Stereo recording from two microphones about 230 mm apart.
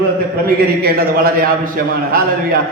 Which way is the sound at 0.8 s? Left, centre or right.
Right.